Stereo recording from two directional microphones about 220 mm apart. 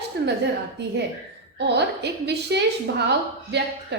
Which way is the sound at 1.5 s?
50° right (ahead or behind).